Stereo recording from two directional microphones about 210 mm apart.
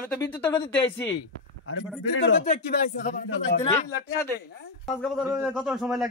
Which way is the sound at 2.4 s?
40° left (ahead or behind).